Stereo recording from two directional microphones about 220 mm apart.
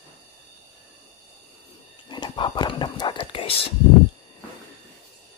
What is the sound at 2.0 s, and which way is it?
Whispering, 20° left (ahead or behind).